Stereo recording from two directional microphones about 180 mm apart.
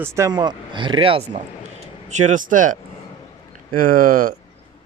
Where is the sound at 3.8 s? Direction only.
50° right (ahead or behind).